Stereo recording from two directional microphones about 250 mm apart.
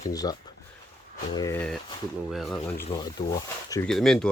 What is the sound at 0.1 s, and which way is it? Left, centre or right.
Speech, centre.